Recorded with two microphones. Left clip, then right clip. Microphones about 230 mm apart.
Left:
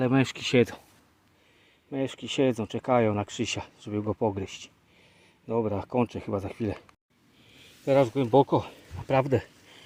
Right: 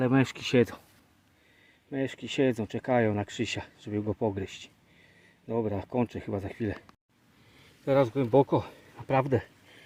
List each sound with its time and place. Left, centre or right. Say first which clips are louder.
0.0 s speech: left 1 dB; centre
1.9 s speech: left 2 dB; centre
7.9 s speech: left 2 dB; centre